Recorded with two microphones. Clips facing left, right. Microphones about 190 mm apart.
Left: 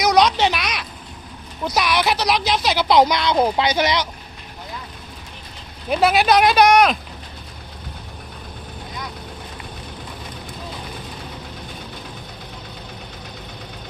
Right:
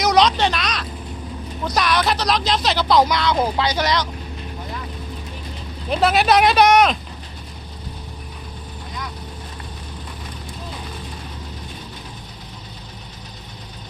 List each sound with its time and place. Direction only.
0.0 s a sound: centre (ahead or behind)
1.6 s speech: 5° left (ahead or behind)
2.9 s speech: 20° left (ahead or behind)
5.9 s speech: 5° left (ahead or behind)